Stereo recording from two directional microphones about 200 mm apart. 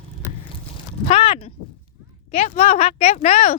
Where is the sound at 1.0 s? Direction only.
30° left (ahead or behind).